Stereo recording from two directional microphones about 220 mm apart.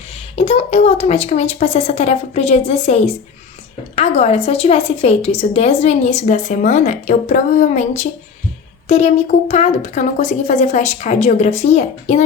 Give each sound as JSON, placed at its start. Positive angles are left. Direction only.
{"t": 0.3, "sound": "a woman's voice", "side_deg": 30}